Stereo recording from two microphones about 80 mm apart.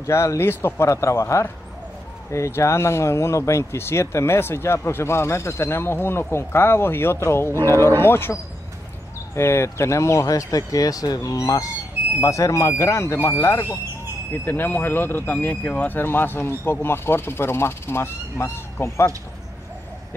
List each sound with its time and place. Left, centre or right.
0.0 s speech: left
14.3 s speech: left